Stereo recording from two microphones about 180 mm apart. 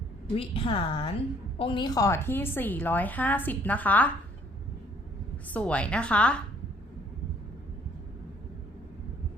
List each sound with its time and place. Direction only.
0.3 s a woman's voice: 30° left (ahead or behind); by 4.1 s 10° left (ahead or behind)
5.5 s a woman's voice: 5° left (ahead or behind)